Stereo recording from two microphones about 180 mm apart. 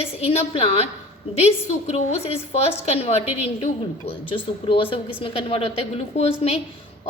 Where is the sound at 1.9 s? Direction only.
35° left (ahead or behind).